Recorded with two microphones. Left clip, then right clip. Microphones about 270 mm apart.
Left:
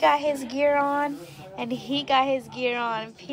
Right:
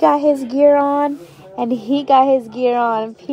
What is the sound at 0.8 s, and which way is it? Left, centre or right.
Speech, right.